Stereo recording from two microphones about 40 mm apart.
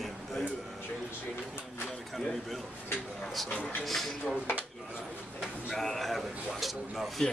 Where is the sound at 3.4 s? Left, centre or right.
Left.